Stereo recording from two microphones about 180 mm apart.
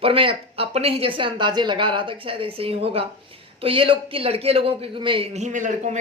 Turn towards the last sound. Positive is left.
turn(degrees=-45)  # may be behind; listen again after turning